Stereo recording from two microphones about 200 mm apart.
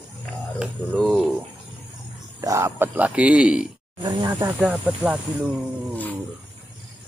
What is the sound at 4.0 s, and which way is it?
Snake, 20° right (ahead or behind).